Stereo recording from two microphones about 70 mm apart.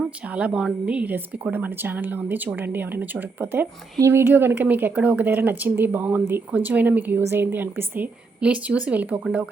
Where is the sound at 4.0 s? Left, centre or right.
Right.